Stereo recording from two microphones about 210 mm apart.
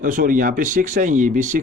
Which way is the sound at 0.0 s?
40° right (ahead or behind).